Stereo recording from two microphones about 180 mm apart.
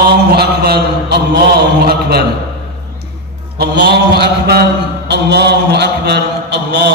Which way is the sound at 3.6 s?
65° right (ahead or behind).